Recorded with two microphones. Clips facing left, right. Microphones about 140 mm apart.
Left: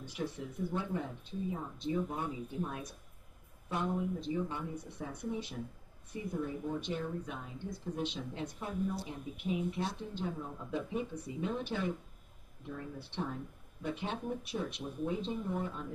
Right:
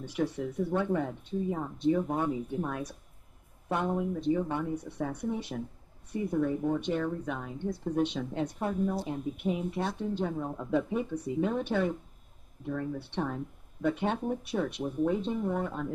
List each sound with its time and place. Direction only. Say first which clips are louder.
0.0 s speech: right 8 dB; 65° right (ahead or behind)